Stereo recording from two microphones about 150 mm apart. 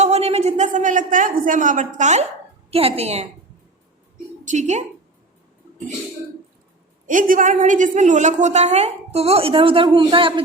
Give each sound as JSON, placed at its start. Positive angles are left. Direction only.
{"t": 0.0, "sound": "a sound", "side_deg": -45}
{"t": 2.6, "sound": "a woman's voice", "side_deg": -40}
{"t": 4.4, "sound": "a woman's voice", "side_deg": -50}
{"t": 7.1, "sound": "a woman's voice", "side_deg": -60}